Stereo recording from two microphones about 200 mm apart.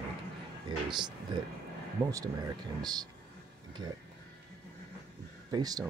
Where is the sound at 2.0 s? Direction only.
15° right (ahead or behind).